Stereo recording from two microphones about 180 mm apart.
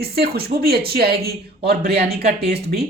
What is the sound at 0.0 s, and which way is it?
A man's voice, 60° right (ahead or behind).